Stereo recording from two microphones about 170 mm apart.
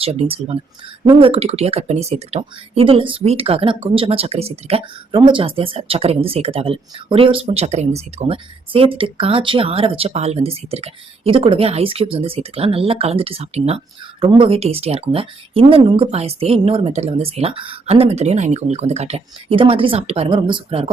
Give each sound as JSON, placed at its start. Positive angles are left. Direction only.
{"t": 0.0, "sound": "speech", "side_deg": -35}